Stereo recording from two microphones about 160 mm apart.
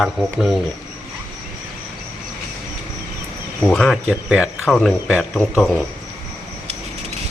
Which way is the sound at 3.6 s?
Centre (ahead or behind).